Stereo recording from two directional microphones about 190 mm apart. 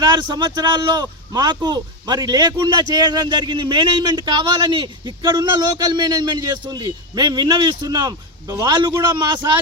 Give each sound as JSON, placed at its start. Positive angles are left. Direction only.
{"t": 0.0, "sound": "a man's voice", "side_deg": -20}